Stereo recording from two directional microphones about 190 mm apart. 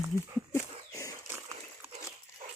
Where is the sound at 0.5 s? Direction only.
15° left (ahead or behind).